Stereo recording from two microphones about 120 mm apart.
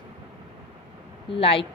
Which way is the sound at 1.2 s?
50° left (ahead or behind).